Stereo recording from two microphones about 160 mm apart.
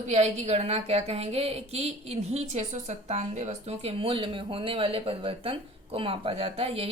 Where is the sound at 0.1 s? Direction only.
45° right (ahead or behind).